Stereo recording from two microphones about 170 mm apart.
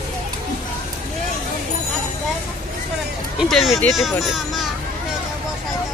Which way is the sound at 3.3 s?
Centre (ahead or behind).